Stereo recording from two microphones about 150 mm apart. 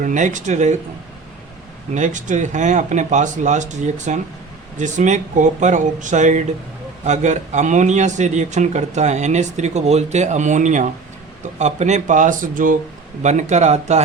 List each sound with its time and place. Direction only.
0.0 s speech: 60° right (ahead or behind)
1.9 s a man's voice: 55° right (ahead or behind)
13.2 s a man's voice: 50° right (ahead or behind)